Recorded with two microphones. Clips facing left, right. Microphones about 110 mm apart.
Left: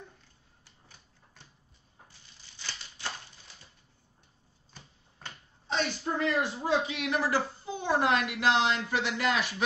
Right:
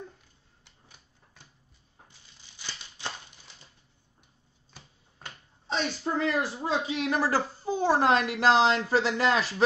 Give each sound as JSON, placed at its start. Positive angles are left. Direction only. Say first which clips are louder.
{"t": 5.7, "sound": "a woman's voice", "louder": "right 1 dB", "side_deg": -30}